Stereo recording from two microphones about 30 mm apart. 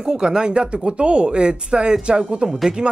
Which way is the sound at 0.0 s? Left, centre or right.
Right.